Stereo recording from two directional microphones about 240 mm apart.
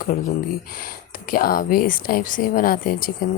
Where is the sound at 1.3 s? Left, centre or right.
Left.